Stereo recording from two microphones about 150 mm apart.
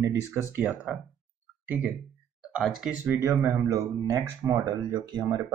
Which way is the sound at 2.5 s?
5° right (ahead or behind).